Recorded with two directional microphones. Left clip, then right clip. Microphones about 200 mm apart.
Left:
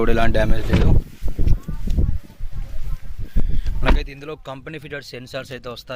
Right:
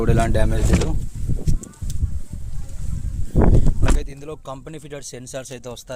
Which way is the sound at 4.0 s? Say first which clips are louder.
Left 2 dB; 20° right (ahead or behind).